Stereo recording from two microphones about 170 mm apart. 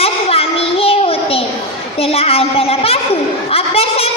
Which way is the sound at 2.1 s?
35° left (ahead or behind).